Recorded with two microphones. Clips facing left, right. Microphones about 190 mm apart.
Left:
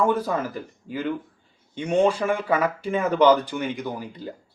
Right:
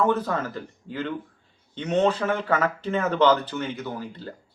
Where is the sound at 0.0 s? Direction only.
10° left (ahead or behind).